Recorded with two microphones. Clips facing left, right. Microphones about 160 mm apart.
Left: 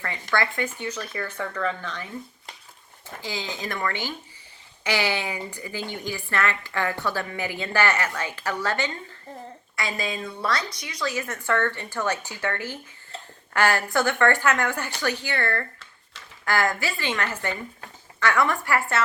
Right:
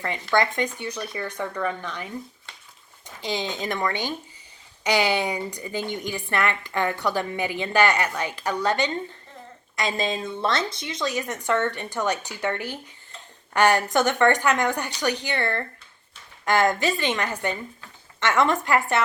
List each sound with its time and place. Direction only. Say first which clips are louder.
0.0 s a woman's voice: right 4 dB; 20° right (ahead or behind)
3.2 s a woman's voice: right 4 dB; 20° right (ahead or behind)